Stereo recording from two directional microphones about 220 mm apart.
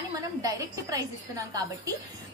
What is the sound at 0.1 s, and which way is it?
A woman's voice, 15° right (ahead or behind).